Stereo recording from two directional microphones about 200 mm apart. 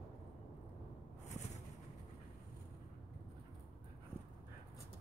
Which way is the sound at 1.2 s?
35° left (ahead or behind).